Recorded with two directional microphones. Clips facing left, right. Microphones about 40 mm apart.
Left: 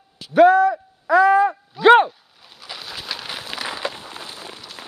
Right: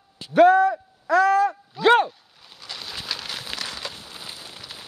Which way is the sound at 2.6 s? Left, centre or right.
Centre.